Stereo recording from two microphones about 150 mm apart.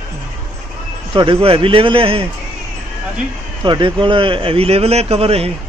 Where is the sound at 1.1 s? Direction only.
35° right (ahead or behind).